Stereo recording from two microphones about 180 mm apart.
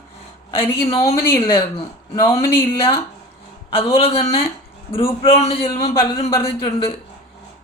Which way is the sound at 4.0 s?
35° left (ahead or behind).